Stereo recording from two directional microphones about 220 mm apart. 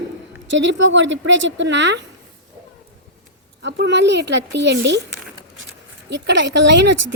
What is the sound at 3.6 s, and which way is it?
Speech, 55° right (ahead or behind).